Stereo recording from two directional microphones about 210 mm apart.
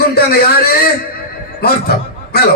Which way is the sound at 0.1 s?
50° left (ahead or behind).